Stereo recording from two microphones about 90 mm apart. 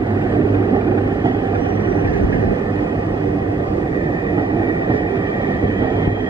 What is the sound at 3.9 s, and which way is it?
Train, 60° right (ahead or behind).